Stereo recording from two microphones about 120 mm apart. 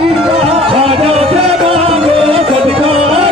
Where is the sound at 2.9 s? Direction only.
50° right (ahead or behind).